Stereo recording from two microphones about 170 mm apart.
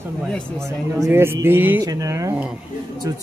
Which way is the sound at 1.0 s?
15° right (ahead or behind).